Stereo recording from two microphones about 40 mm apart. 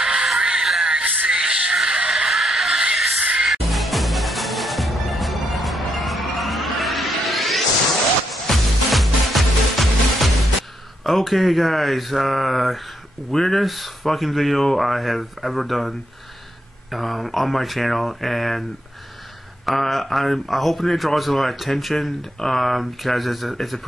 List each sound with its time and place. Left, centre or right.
0.0 s music: centre
2.3 s music: centre
11.1 s speech: centre
13.3 s speech: centre
13.6 s speech: centre
16.9 s speech: centre
19.6 s speech: centre